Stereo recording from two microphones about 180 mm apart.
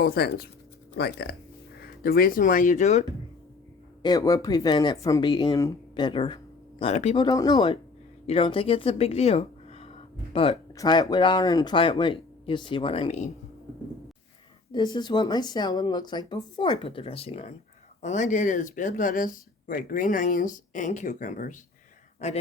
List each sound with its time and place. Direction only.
0.0 s speech: 55° left (ahead or behind); by 3.0 s 40° left (ahead or behind)
4.0 s speech: 20° left (ahead or behind); by 13.3 s 35° left (ahead or behind)
14.7 s speech: 25° left (ahead or behind)